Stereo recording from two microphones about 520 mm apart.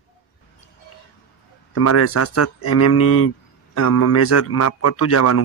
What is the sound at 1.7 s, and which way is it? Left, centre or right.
A man's voice, left.